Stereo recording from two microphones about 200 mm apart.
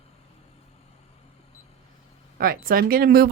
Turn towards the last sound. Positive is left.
turn(degrees=-50)  # may be behind; listen again after turning